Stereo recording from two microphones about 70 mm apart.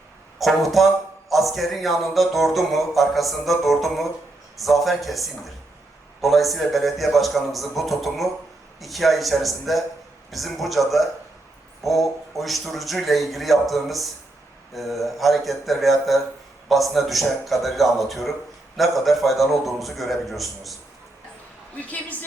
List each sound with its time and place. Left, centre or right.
0.3 s speech: centre
1.3 s music: centre
21.8 s a woman's voice: left